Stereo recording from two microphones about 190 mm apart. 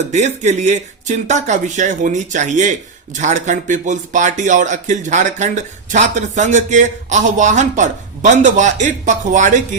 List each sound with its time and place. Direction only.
0.1 s speech: 40° right (ahead or behind)